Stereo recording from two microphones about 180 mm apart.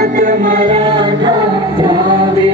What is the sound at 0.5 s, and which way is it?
Music, 30° right (ahead or behind).